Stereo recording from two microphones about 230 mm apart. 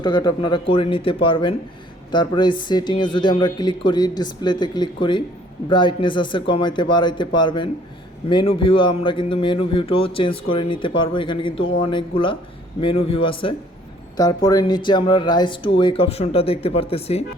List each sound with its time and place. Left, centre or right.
0.0 s speech: centre